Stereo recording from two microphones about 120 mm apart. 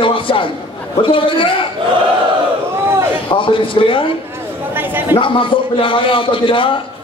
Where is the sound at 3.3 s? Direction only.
45° left (ahead or behind).